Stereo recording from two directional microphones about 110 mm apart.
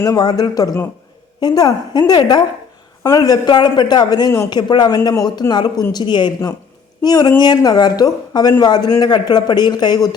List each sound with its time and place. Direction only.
0.0 s speech: 35° left (ahead or behind)